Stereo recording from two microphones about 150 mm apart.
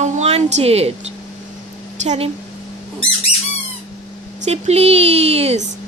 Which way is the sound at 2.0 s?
50° right (ahead or behind).